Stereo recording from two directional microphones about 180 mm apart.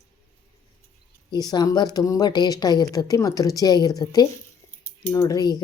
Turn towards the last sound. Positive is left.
turn(degrees=20)  # may be behind; listen again after turning